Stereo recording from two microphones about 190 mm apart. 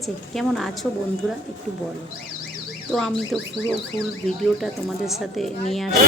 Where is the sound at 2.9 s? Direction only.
Centre (ahead or behind).